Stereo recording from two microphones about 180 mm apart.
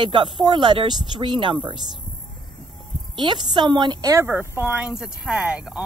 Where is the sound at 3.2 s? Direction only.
25° right (ahead or behind).